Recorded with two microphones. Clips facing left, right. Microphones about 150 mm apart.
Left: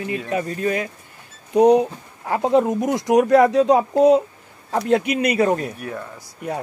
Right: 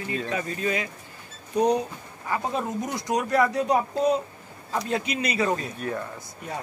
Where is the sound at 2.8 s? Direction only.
90° left.